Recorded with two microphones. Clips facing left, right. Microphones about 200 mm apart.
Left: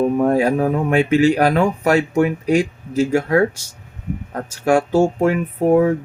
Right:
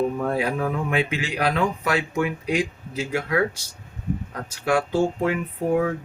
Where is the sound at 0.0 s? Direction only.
45° left (ahead or behind).